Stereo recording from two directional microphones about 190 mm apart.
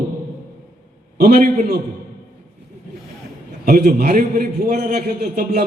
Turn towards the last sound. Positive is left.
turn(degrees=-50)  # may be behind; listen again after turning